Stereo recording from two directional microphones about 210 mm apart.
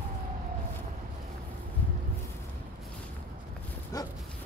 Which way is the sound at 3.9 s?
15° left (ahead or behind).